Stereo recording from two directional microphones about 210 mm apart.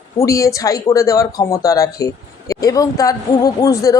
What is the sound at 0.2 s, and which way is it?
Speech, 15° left (ahead or behind).